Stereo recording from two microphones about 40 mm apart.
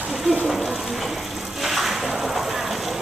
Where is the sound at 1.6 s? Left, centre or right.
Centre.